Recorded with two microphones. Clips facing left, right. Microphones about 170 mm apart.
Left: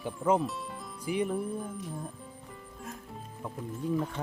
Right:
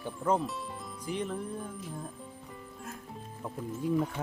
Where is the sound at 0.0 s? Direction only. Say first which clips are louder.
Left 2 dB; 5° left (ahead or behind).